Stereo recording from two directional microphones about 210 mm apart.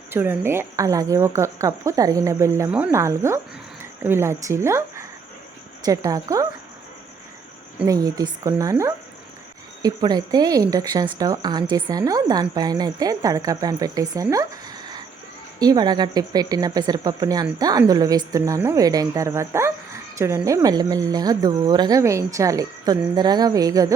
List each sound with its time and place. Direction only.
0.1 s speech: 10° right (ahead or behind)
7.9 s speech: 20° right (ahead or behind)